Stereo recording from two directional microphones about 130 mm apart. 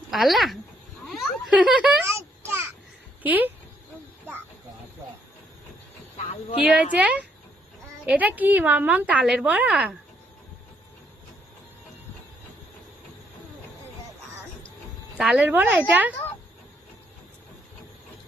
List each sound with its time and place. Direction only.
0.1 s speech: centre (ahead or behind)
2.4 s a sound: 20° right (ahead or behind)
3.2 s a woman's voice: 15° right (ahead or behind)
6.6 s a woman's voice: 5° right (ahead or behind)
15.2 s a woman's voice: 10° right (ahead or behind)